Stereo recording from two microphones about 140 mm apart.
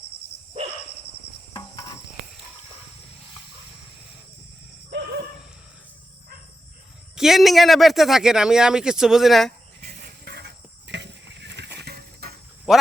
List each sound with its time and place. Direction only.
7.2 s speech: centre (ahead or behind)
10.3 s a sound: 90° right
12.2 s cricket: 90° right
12.7 s speech: 5° right (ahead or behind)